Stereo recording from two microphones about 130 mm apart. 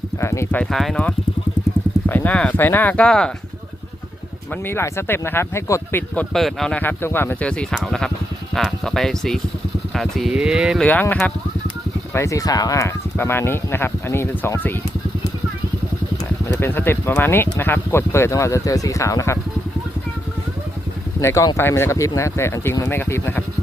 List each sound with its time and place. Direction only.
0.2 s speech: 20° left (ahead or behind)
0.6 s speech: centre (ahead or behind)
4.6 s speech: 20° left (ahead or behind)
6.3 s speech: centre (ahead or behind)
12.1 s speech: 25° left (ahead or behind)
16.6 s speech: 15° left (ahead or behind)
21.2 s speech: 20° left (ahead or behind)